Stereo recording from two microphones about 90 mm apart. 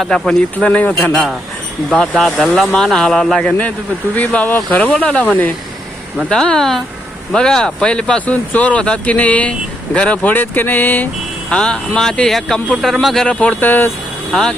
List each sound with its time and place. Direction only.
0.0 s speech: 5° left (ahead or behind)
1.1 s speech: 5° right (ahead or behind)
4.1 s speech: 15° left (ahead or behind)
6.2 s speech: 5° left (ahead or behind)
13.2 s speech: 15° left (ahead or behind)